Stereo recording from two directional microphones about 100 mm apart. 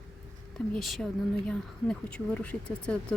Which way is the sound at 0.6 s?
Centre (ahead or behind).